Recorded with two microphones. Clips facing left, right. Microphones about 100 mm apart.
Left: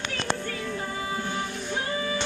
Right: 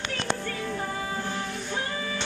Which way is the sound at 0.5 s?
35° right (ahead or behind).